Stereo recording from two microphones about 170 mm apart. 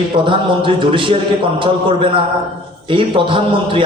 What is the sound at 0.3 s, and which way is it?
A man's voice, 30° right (ahead or behind).